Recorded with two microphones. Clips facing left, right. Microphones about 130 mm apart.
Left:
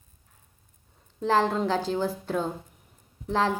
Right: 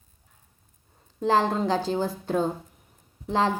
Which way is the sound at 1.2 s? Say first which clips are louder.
Right 1 dB; 15° right (ahead or behind).